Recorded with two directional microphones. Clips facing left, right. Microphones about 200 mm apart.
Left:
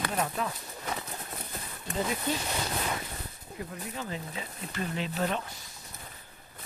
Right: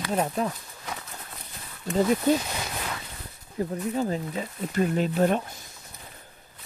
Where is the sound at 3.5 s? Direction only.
35° right (ahead or behind).